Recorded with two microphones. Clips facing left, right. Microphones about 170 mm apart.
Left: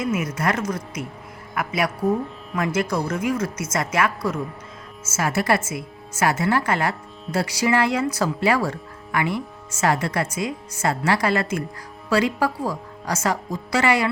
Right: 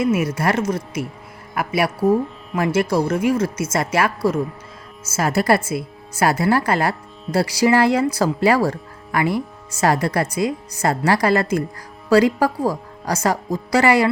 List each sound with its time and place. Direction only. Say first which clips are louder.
0.0 s speech: right 5 dB; 30° right (ahead or behind)